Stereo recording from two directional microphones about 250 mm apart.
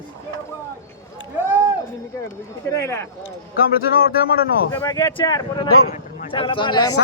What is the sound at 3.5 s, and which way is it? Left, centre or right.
Speech, left.